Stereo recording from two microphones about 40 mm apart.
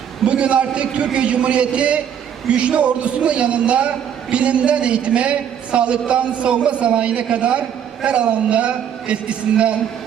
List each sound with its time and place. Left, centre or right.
0.3 s a man's voice: right